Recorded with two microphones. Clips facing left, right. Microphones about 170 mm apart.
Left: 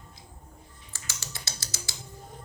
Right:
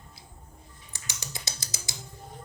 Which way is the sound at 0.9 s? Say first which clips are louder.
Right 1 dB; 20° right (ahead or behind).